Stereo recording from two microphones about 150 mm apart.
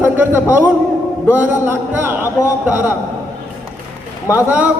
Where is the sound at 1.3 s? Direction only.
15° right (ahead or behind).